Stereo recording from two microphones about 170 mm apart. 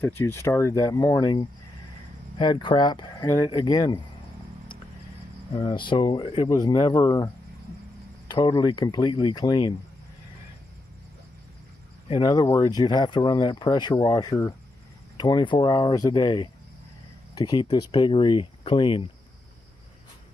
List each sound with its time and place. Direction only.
0.0 s speech: 15° left (ahead or behind)
5.5 s speech: 30° left (ahead or behind)
8.3 s speech: 25° left (ahead or behind)
12.1 s speech: 25° left (ahead or behind)